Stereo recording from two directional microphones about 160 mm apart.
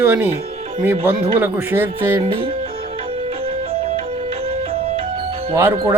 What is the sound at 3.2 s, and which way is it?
Music, 35° right (ahead or behind).